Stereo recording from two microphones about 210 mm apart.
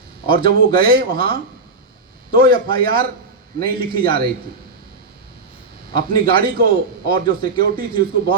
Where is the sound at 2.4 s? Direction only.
45° right (ahead or behind).